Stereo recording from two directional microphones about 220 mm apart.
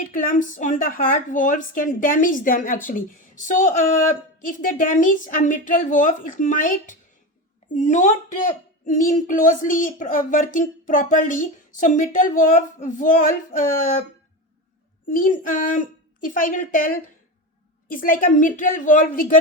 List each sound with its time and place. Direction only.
0.0 s speech: 40° left (ahead or behind)
15.1 s speech: 40° left (ahead or behind)